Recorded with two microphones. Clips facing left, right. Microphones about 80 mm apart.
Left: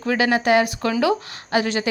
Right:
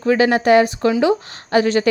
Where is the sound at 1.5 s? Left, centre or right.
Right.